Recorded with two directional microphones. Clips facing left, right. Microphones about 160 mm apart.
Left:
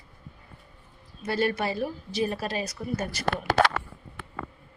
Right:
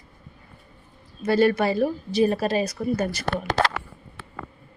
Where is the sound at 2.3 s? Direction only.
50° right (ahead or behind).